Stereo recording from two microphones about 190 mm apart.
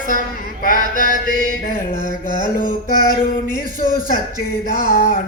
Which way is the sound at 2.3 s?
45° left (ahead or behind).